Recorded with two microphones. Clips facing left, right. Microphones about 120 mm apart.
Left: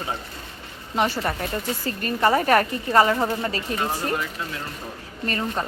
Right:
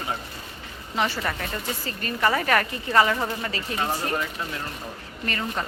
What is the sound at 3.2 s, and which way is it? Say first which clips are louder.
Speech: left 4 dB; 20° left (ahead or behind).